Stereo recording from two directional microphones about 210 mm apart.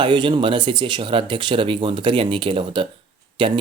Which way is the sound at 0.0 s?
20° right (ahead or behind).